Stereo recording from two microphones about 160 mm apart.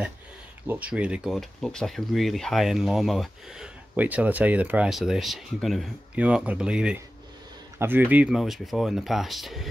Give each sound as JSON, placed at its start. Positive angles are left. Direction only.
{"t": 0.7, "sound": "speech", "side_deg": -10}